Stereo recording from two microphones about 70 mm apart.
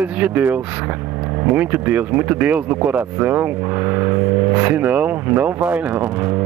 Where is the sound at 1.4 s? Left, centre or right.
Right.